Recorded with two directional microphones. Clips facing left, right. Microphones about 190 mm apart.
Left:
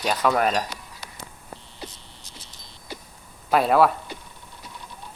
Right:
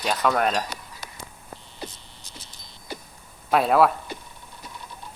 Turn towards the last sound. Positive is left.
turn(degrees=0)  # may be behind; listen again after turning